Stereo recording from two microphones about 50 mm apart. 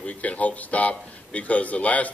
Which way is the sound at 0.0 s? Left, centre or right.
Left.